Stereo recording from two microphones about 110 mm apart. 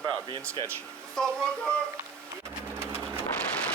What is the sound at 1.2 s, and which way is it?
Speech, 5° left (ahead or behind).